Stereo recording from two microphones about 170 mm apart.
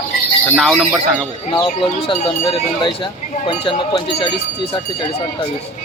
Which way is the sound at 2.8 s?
30° left (ahead or behind).